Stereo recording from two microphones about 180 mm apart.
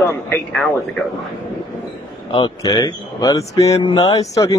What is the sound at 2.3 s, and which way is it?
Speech, 25° left (ahead or behind).